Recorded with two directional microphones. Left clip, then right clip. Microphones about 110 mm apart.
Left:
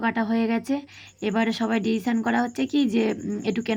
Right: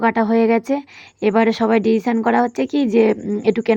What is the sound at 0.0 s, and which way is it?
Speech, 45° right (ahead or behind).